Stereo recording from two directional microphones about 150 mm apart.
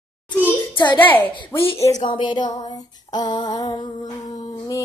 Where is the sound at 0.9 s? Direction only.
10° left (ahead or behind).